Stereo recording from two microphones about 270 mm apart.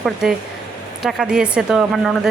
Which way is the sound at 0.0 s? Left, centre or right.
Centre.